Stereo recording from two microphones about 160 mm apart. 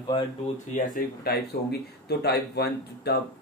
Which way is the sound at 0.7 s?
70° left (ahead or behind).